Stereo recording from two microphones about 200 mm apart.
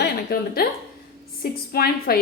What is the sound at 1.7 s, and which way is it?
Speech, 50° left (ahead or behind).